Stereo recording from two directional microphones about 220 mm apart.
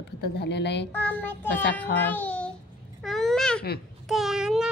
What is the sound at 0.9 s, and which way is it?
Child singing, 10° left (ahead or behind).